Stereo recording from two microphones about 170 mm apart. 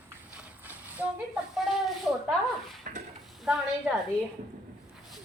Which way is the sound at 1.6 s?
Centre (ahead or behind).